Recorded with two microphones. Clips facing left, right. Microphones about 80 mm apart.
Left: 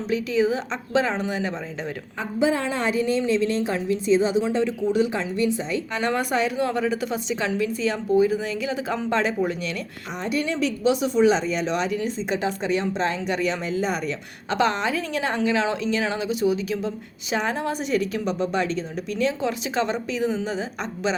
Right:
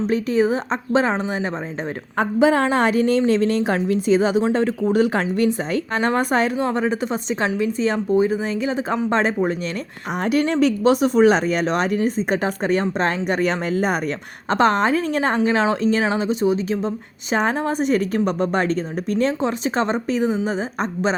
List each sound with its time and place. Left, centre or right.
0.1 s speech: right
2.1 s a woman's voice: right
4.4 s speech: right
10.2 s speech: right
19.4 s speech: right